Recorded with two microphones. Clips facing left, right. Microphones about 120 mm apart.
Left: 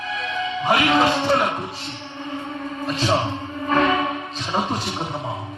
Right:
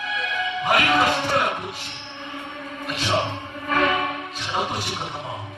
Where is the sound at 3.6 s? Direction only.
30° left (ahead or behind).